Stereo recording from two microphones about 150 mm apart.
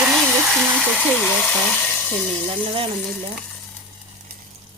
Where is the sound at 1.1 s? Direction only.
10° left (ahead or behind).